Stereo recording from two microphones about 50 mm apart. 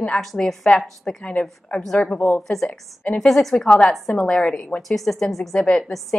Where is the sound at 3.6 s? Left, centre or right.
Left.